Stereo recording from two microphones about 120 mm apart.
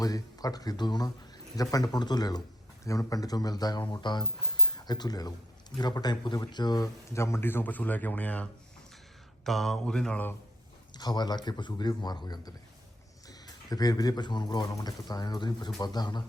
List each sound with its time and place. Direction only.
0.0 s speech: 30° left (ahead or behind); by 8.4 s 15° left (ahead or behind)
9.4 s speech: centre (ahead or behind)
10.9 s speech: 35° left (ahead or behind)